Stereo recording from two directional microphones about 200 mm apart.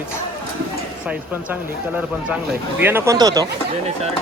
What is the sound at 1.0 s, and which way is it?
Speech, 5° right (ahead or behind).